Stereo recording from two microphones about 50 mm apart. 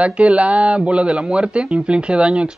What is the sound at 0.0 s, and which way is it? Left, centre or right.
Speech, right.